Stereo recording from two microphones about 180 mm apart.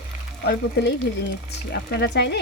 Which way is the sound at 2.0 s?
70° left (ahead or behind).